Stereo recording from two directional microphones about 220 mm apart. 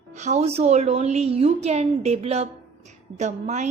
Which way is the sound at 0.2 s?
30° right (ahead or behind).